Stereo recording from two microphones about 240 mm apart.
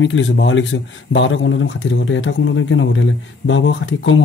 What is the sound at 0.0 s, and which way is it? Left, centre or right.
A man's voice, left.